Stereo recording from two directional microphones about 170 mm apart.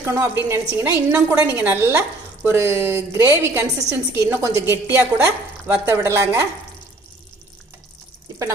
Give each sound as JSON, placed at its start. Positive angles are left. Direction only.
{"t": 0.0, "sound": "a woman's voice", "side_deg": -15}